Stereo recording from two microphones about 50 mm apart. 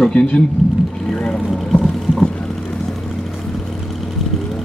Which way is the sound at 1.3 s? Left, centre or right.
Centre.